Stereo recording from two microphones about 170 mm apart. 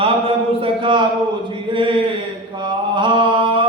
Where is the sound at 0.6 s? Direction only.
30° right (ahead or behind).